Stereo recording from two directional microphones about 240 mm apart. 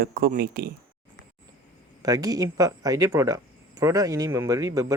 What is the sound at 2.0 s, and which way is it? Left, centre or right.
Speech, centre.